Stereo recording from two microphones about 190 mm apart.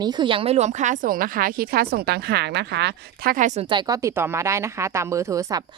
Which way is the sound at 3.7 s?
15° right (ahead or behind).